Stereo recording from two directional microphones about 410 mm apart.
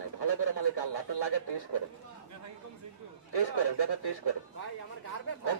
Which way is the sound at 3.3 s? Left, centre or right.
Left.